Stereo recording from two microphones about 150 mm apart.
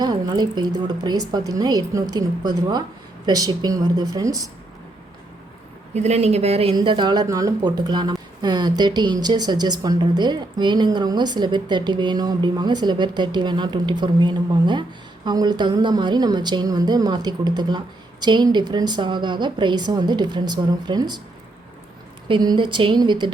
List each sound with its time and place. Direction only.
0.0 s a woman's voice: 30° right (ahead or behind)
5.9 s speech: 45° right (ahead or behind)
6.7 s a woman's voice: 30° right (ahead or behind)
22.3 s speech: 30° right (ahead or behind)